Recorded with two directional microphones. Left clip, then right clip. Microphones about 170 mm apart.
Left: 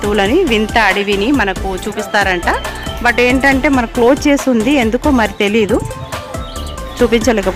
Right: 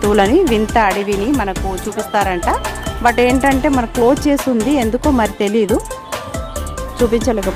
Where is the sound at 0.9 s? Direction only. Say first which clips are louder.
Left 3 dB; 5° right (ahead or behind).